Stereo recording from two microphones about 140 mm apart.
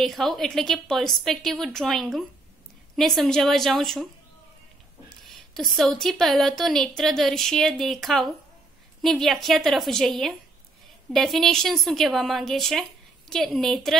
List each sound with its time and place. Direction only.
0.0 s a woman's voice: centre (ahead or behind)
5.2 s a woman's voice: centre (ahead or behind)